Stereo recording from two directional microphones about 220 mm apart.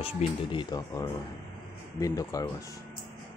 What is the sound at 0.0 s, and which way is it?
Speech, 20° left (ahead or behind).